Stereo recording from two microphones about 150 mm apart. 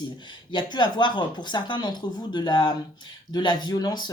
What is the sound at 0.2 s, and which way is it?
Speech, 30° left (ahead or behind).